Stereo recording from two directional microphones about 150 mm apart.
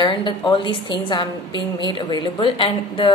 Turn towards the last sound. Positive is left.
turn(degrees=35)  # may be behind; listen again after turning